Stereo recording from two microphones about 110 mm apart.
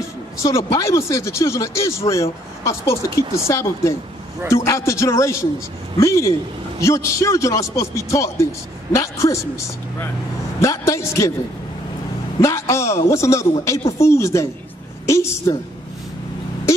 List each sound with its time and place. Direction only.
0.4 s speech: 25° left (ahead or behind)
12.4 s speech: 30° left (ahead or behind)